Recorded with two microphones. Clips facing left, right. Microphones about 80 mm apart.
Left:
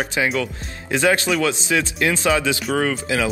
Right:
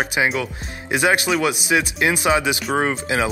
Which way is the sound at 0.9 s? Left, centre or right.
Centre.